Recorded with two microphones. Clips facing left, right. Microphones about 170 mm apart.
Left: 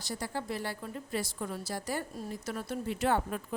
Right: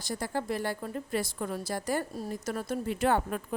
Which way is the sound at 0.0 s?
50° right (ahead or behind).